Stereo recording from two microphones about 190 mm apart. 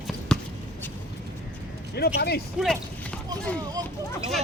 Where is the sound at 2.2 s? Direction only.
55° left (ahead or behind).